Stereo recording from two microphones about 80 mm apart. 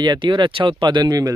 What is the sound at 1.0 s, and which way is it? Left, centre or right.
Speech, right.